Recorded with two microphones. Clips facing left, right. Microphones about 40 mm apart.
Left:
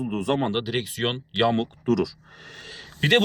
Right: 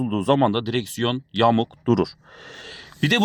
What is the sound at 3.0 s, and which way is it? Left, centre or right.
Speech, left.